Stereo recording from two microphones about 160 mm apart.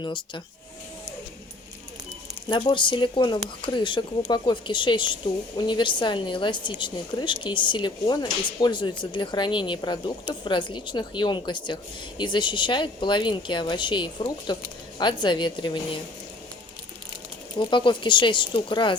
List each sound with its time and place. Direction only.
0.0 s speech: 30° left (ahead or behind)
2.5 s a woman's voice: 30° left (ahead or behind)
17.6 s a woman's voice: 30° left (ahead or behind)